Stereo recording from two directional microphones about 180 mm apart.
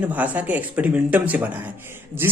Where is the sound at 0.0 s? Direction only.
10° right (ahead or behind).